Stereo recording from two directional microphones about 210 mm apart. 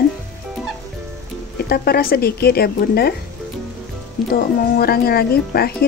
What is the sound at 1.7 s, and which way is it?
Speech, 45° left (ahead or behind).